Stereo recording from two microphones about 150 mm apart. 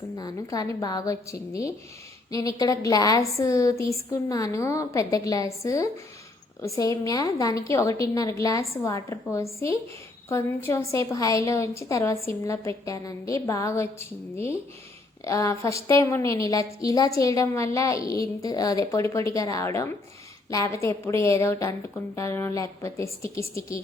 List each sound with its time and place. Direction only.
0.2 s a woman's voice: 25° left (ahead or behind)
15.2 s a woman's voice: 20° left (ahead or behind)